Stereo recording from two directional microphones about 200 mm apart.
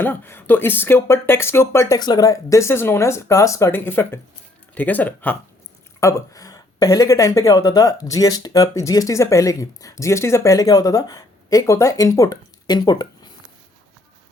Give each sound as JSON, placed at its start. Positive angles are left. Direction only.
{"t": 0.0, "sound": "speech", "side_deg": 10}